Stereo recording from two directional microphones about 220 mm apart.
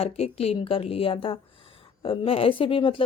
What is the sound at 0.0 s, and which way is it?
A woman's voice, 25° left (ahead or behind).